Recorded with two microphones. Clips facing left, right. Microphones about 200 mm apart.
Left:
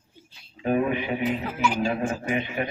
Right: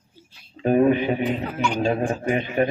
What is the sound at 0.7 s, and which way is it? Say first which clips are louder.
Speech: right 6 dB; 40° right (ahead or behind).